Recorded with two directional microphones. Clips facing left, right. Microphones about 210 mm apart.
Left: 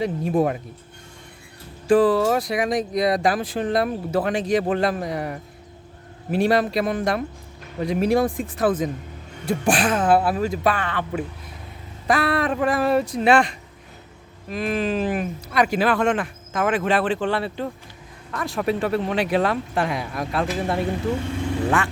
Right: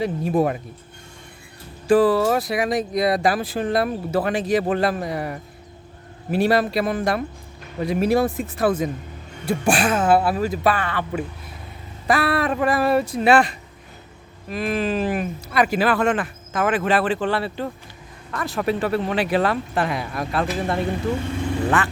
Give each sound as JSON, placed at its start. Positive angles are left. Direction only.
{"t": 0.0, "sound": "speech", "side_deg": -5}
{"t": 1.9, "sound": "speech", "side_deg": -5}